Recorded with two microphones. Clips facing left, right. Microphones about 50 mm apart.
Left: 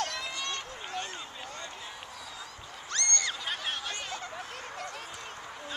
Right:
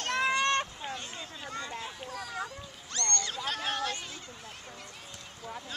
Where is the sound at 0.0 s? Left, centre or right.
Right.